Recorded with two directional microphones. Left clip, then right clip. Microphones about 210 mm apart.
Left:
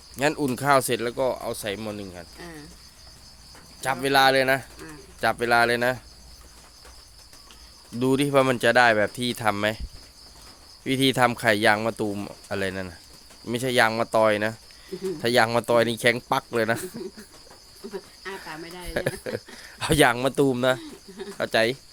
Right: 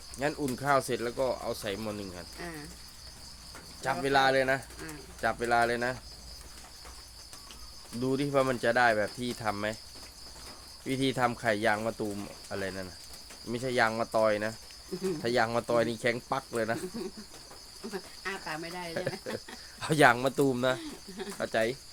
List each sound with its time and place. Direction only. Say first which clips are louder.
0.2 s speech: left 8 dB; 50° left (ahead or behind); by 2.6 s 25° left (ahead or behind)
3.8 s speech: left 6 dB; 40° left (ahead or behind)
8.0 s speech: left 7 dB; 50° left (ahead or behind)
10.8 s speech: left 8 dB; 40° left (ahead or behind)
17.9 s cricket: left 2 dB; 10° right (ahead or behind)
19.3 s speech: left 6 dB; 40° left (ahead or behind)